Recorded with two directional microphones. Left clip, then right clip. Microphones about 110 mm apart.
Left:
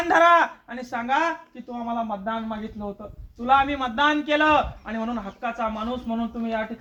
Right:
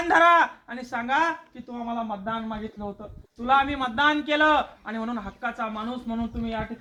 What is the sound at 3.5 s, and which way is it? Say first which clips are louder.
A man's voice: left 2 dB; 20° left (ahead or behind).